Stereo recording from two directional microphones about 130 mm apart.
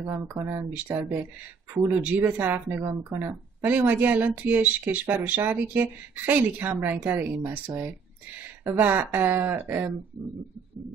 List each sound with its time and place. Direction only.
0.0 s speech: 25° right (ahead or behind)